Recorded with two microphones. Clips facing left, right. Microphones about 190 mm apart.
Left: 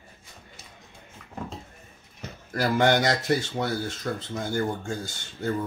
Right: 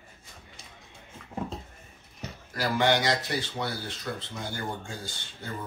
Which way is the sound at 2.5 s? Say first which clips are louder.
Left 3 dB; 50° left (ahead or behind).